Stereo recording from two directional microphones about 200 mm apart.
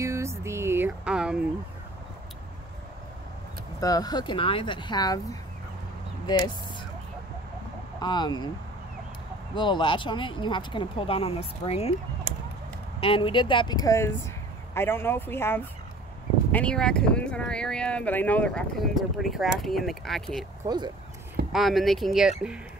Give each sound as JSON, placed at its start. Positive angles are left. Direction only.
{"t": 0.0, "sound": "a sound", "side_deg": -15}
{"t": 3.8, "sound": "speech", "side_deg": 20}
{"t": 8.0, "sound": "speech", "side_deg": 20}
{"t": 9.6, "sound": "speech", "side_deg": 25}
{"t": 13.0, "sound": "speech", "side_deg": 25}
{"t": 20.6, "sound": "speech", "side_deg": -20}
{"t": 21.5, "sound": "speech", "side_deg": 0}